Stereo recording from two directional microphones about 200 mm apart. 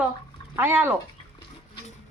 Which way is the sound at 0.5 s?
10° right (ahead or behind).